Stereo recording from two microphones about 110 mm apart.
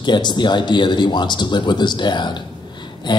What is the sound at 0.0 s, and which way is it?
Speech, 45° left (ahead or behind).